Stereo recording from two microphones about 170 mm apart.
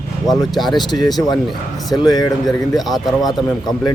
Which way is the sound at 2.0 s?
25° left (ahead or behind).